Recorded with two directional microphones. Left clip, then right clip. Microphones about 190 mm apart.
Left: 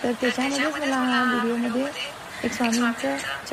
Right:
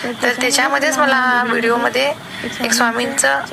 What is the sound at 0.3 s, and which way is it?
A woman's voice, 50° right (ahead or behind).